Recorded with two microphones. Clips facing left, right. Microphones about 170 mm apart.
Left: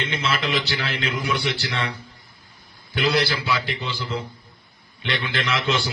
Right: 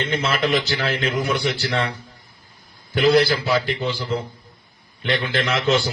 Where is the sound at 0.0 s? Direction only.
45° right (ahead or behind).